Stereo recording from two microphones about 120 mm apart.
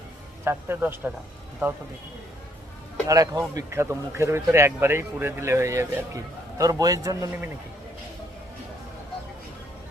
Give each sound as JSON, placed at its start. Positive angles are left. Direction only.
{"t": 0.4, "sound": "a man's voice", "side_deg": -20}
{"t": 3.1, "sound": "a man's voice", "side_deg": -30}